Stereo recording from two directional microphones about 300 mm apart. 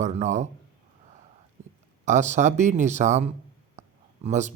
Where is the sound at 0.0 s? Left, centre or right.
Right.